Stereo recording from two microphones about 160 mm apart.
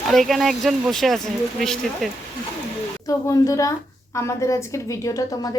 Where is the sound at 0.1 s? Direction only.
Centre (ahead or behind).